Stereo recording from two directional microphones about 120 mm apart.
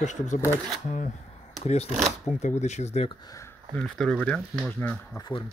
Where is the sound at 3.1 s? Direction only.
30° left (ahead or behind).